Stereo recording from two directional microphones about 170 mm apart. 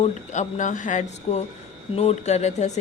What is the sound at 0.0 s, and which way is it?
Speech, 45° left (ahead or behind).